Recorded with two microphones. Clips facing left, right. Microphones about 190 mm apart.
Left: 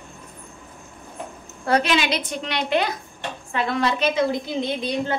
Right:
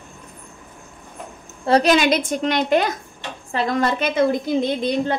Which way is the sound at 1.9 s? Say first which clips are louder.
Right 6 dB; 50° right (ahead or behind).